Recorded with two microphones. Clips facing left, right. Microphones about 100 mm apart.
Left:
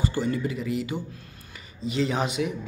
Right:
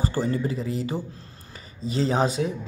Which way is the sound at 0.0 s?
35° right (ahead or behind).